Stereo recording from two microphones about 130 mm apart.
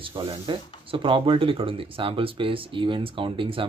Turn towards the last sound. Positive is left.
turn(degrees=-40)  # may be behind; listen again after turning